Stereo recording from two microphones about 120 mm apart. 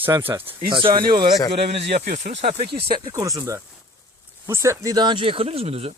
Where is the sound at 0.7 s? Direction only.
40° right (ahead or behind).